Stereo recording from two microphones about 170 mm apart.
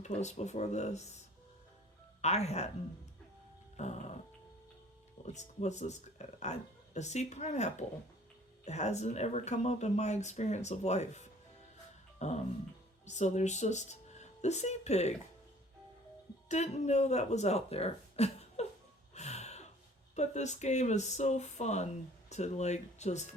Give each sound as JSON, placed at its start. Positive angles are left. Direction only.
{"t": 0.0, "sound": "speech", "side_deg": 40}
{"t": 2.2, "sound": "speech", "side_deg": 40}
{"t": 3.8, "sound": "speech", "side_deg": 40}
{"t": 5.2, "sound": "speech", "side_deg": 40}
{"t": 16.5, "sound": "speech", "side_deg": 40}
{"t": 19.1, "sound": "gasp", "side_deg": 40}
{"t": 20.1, "sound": "speech", "side_deg": 45}